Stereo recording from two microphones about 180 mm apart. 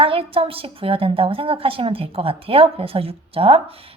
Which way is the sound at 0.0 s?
30° right (ahead or behind).